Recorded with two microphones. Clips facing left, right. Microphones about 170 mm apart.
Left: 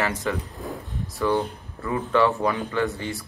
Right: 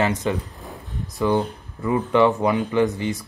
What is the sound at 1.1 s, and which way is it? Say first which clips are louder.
Speech: right 3 dB; 20° right (ahead or behind).